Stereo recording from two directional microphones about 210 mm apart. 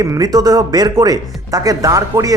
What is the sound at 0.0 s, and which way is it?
Speech, 15° right (ahead or behind).